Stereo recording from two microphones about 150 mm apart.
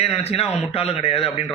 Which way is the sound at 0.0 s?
45° left (ahead or behind).